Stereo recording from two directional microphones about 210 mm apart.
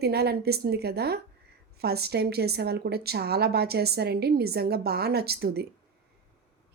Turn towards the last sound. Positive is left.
turn(degrees=-50)  # may be behind; listen again after turning